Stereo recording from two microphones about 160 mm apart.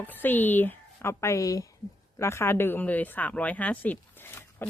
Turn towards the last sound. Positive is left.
turn(degrees=15)  # may be behind; listen again after turning